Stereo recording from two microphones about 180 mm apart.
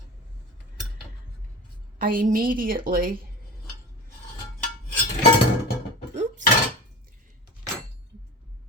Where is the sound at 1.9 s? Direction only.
55° right (ahead or behind).